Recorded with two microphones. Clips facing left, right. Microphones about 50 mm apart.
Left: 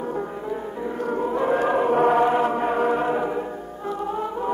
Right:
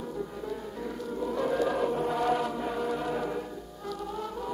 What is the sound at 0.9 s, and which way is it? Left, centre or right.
Music, left.